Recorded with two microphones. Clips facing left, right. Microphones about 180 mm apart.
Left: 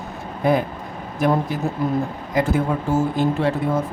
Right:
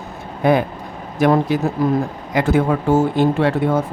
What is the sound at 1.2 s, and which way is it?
Speech, 90° right.